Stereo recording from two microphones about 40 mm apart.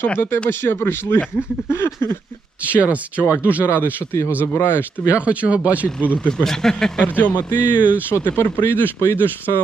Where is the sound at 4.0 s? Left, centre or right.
Left.